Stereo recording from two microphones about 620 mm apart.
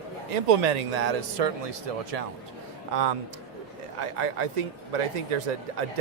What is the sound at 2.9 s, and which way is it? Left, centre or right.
A man's voice, right.